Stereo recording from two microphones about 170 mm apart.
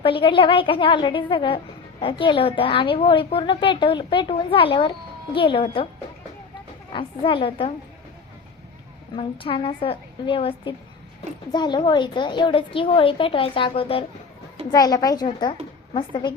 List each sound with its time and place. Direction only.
0.0 s a woman's voice: 30° left (ahead or behind)
6.9 s a woman's voice: 30° left (ahead or behind)
9.1 s a woman's voice: 30° left (ahead or behind)
14.7 s speech: 20° left (ahead or behind)